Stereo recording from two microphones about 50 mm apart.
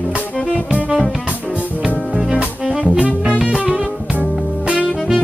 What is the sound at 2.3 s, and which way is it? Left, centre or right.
Music, right.